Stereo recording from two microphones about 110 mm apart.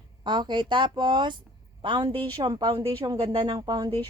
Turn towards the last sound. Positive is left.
turn(degrees=-40)  # may be behind; listen again after turning